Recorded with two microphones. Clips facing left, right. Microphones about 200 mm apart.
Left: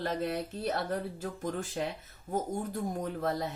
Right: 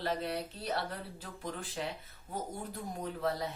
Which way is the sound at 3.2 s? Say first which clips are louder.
Left 1 dB; 50° left (ahead or behind).